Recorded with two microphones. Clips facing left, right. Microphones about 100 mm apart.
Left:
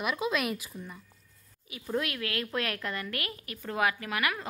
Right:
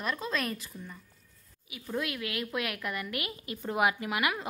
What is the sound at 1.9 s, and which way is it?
A woman's voice, 15° right (ahead or behind).